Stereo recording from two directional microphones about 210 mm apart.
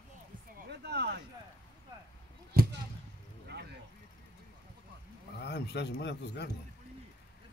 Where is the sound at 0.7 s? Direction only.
50° right (ahead or behind).